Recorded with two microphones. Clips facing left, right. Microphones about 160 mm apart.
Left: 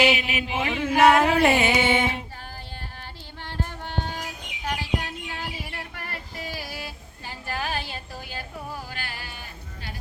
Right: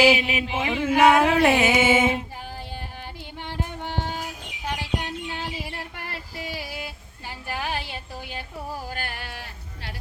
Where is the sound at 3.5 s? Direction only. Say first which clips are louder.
Right 1 dB; 15° right (ahead or behind).